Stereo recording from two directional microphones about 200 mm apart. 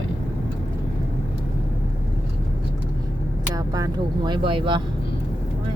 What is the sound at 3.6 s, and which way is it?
Speech, 20° right (ahead or behind).